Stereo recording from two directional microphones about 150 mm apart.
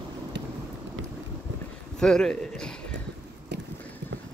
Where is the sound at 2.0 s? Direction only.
5° left (ahead or behind).